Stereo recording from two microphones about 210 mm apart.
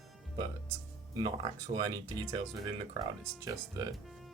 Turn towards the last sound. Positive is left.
turn(degrees=-15)  # may be behind; listen again after turning